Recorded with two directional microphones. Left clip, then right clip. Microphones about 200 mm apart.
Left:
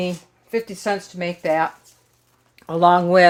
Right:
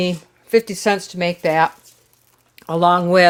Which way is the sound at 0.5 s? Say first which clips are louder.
Right 7 dB; 50° right (ahead or behind).